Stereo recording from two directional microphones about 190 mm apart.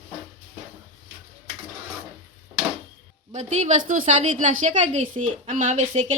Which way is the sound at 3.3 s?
40° right (ahead or behind).